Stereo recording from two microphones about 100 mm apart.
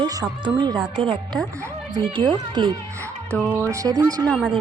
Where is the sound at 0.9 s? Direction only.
65° right (ahead or behind).